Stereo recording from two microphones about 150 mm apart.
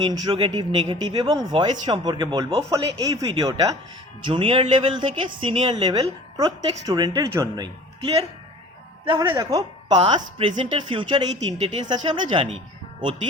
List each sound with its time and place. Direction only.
0.1 s a woman's voice: 30° right (ahead or behind)
4.3 s a woman's voice: 35° right (ahead or behind)
9.4 s a woman's voice: 20° right (ahead or behind)
10.0 s a woman's voice: 35° right (ahead or behind)